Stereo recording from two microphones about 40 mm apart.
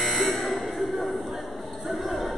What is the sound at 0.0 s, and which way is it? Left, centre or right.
Buzzer, centre.